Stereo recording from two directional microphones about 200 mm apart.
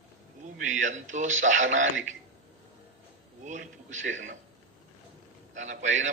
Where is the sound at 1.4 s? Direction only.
40° right (ahead or behind).